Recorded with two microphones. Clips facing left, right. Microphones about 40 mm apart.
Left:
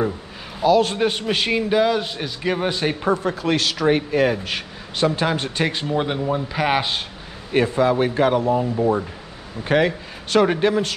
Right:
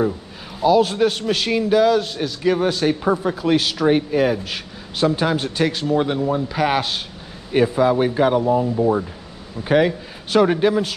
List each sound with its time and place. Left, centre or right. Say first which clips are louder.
0.6 s a man's voice: right 1 dB; centre
0.9 s a man's voice: right 2 dB; centre
3.1 s a man's voice: even; centre
5.7 s speech: right 3 dB; centre
7.5 s a man's voice: right 1 dB; centre